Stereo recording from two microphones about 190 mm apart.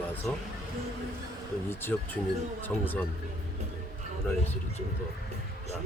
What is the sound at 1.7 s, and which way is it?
Speech, 10° left (ahead or behind).